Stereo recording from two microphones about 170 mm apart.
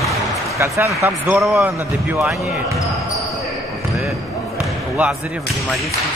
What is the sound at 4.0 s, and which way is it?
Basketball bounce, centre (ahead or behind).